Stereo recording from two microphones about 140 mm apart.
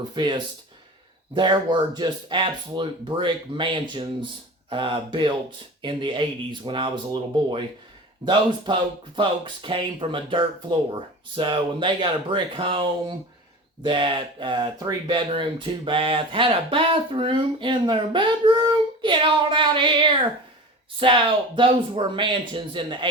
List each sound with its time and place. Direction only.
0.1 s speech: 35° right (ahead or behind)